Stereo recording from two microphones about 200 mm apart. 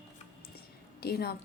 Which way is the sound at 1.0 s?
50° left (ahead or behind).